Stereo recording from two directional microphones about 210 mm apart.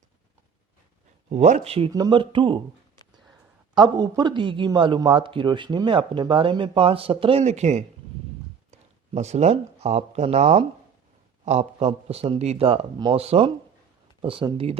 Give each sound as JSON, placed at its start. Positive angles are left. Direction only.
{"t": 1.3, "sound": "a man's voice", "side_deg": -35}
{"t": 3.8, "sound": "a man's voice", "side_deg": -20}